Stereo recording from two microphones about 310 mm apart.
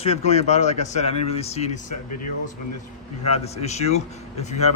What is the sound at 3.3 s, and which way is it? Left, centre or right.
Speech, left.